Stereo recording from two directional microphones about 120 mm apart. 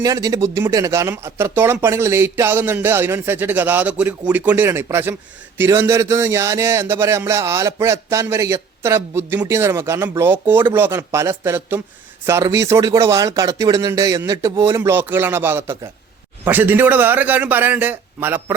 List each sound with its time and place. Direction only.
0.0 s a man's voice: 30° right (ahead or behind)